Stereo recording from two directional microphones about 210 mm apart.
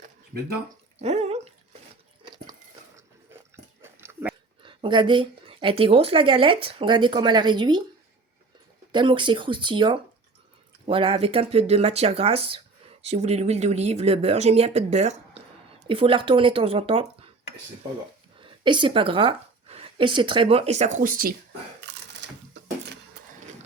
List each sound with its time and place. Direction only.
1.0 s speech: 30° right (ahead or behind)
2.2 s a sound: 20° right (ahead or behind)
3.5 s biting: 10° right (ahead or behind)
4.6 s speech: 25° right (ahead or behind)
8.9 s speech: 20° right (ahead or behind)
18.3 s a woman's voice: 25° right (ahead or behind); by 21.3 s 40° right (ahead or behind)
21.8 s a sound: 55° right (ahead or behind)